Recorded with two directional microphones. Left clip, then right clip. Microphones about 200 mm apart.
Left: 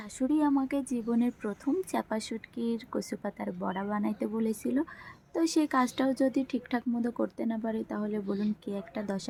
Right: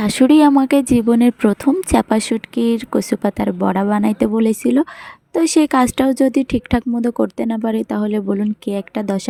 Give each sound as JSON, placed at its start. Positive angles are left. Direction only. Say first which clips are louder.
{"t": 0.0, "sound": "speech", "louder": "right 18 dB", "side_deg": -45}